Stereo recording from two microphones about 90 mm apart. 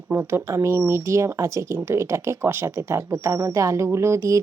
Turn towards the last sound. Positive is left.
turn(degrees=-35)  # may be behind; listen again after turning